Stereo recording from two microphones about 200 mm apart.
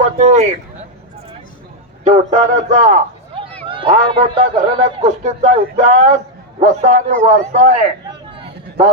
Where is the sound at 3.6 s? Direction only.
25° right (ahead or behind).